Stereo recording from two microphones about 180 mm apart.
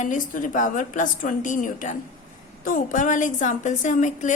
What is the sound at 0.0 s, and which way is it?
A woman's voice, 45° left (ahead or behind).